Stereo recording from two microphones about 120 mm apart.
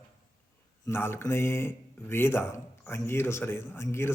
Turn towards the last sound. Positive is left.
turn(degrees=20)  # may be behind; listen again after turning